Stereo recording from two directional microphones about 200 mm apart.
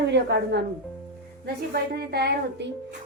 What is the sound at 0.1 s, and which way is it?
Speech, 60° right (ahead or behind).